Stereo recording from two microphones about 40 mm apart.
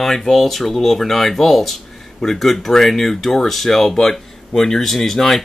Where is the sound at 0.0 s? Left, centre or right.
Centre.